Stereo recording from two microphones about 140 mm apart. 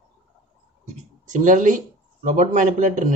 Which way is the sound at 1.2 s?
65° right (ahead or behind).